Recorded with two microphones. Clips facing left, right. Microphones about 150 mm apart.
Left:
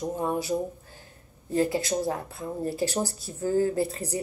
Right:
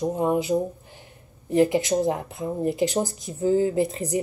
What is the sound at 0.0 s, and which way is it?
Speech, 20° right (ahead or behind).